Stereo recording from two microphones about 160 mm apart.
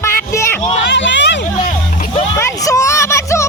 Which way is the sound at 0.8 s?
90° left.